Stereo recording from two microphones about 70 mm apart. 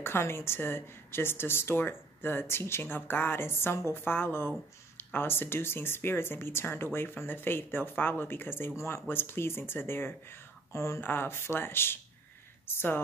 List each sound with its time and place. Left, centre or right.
0.0 s speech: left
11.0 s speech: left